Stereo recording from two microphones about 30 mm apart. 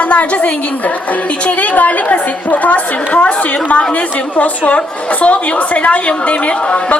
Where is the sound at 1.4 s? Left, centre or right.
Left.